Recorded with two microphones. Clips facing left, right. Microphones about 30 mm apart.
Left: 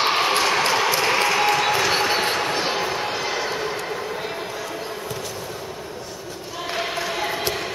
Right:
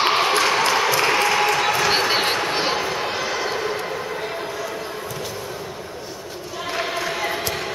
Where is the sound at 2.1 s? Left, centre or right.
Centre.